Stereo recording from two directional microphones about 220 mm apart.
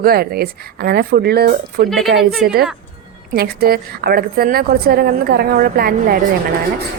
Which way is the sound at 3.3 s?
45° right (ahead or behind).